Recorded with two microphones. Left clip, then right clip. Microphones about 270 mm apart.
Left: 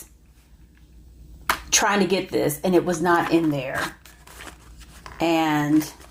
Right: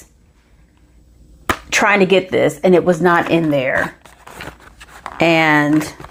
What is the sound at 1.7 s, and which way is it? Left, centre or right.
A woman's voice, right.